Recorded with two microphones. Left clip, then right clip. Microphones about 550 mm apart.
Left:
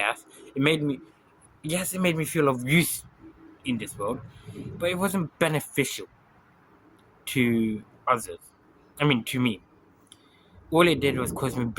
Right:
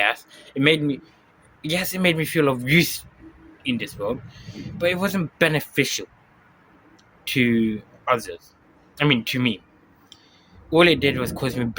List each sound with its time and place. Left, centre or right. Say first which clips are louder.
0.0 s a sound: right 6 dB; left
1.7 s speech: right 5 dB; left
7.3 s speech: right 4 dB; left
10.7 s speech: right 5 dB; left